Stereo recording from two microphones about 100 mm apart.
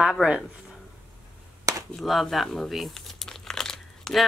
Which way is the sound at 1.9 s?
Centre (ahead or behind).